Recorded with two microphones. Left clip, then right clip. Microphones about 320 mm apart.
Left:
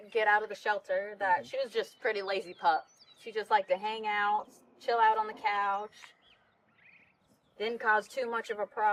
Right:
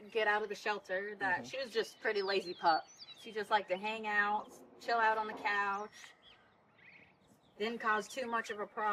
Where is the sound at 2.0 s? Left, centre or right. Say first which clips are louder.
Left 2 dB; centre.